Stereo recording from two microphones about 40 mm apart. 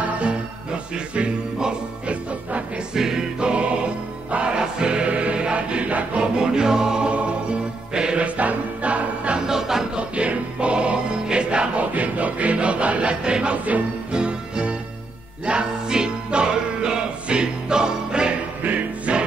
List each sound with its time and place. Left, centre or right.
0.9 s music: right
2.9 s music: centre
3.3 s music: right
6.2 s music: centre
7.1 s music: right
8.2 s music: right
9.5 s music: centre
9.9 s music: right
11.8 s music: right
14.1 s music: right
18.6 s music: right